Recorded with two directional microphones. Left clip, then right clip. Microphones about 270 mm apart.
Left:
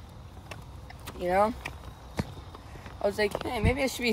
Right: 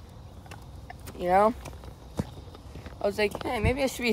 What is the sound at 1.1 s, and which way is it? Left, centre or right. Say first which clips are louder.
Speech: right 3 dB; centre.